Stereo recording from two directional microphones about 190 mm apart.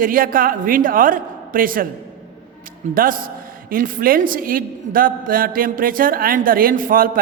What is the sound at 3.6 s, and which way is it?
A man's voice, 50° right (ahead or behind).